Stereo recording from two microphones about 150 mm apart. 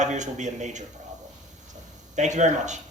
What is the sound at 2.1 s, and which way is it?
Speech, 50° right (ahead or behind).